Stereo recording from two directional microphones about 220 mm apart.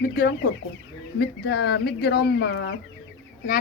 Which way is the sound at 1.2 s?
50° left (ahead or behind).